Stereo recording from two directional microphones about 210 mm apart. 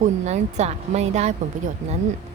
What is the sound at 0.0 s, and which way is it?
A woman's voice, 30° right (ahead or behind).